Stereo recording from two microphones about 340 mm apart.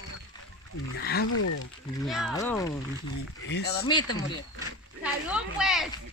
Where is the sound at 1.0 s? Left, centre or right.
Left.